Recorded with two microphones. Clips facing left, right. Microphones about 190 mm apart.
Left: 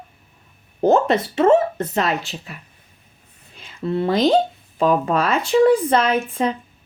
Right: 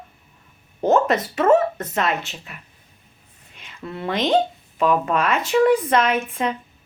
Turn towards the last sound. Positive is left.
turn(degrees=35)  # may be behind; listen again after turning